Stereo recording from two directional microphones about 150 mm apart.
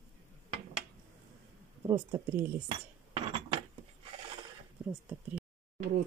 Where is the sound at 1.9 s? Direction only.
20° right (ahead or behind).